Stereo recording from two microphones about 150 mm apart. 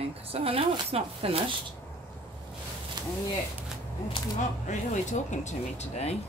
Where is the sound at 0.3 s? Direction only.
40° right (ahead or behind).